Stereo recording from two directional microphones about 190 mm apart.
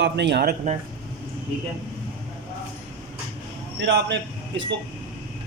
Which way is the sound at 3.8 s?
65° right (ahead or behind).